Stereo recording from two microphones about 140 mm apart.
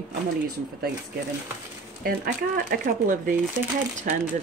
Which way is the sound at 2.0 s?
90° right.